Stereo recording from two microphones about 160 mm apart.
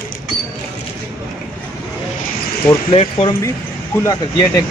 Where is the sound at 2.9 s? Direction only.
35° left (ahead or behind).